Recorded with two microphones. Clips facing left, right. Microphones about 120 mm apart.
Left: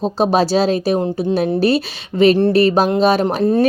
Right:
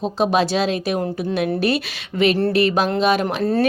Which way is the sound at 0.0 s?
35° left (ahead or behind).